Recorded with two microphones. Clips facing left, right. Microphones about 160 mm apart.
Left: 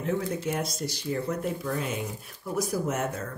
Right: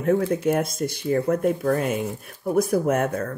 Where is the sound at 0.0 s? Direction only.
55° right (ahead or behind).